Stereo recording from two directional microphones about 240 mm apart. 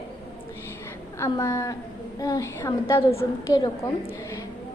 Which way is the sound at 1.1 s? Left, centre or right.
Centre.